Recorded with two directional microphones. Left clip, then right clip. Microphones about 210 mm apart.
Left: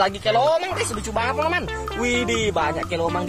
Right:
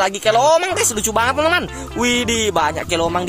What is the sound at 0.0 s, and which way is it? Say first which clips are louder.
Speech: right 4 dB; 40° right (ahead or behind).